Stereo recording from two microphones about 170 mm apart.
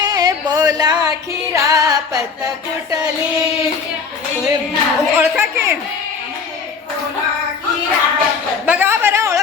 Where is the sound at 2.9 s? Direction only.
20° right (ahead or behind).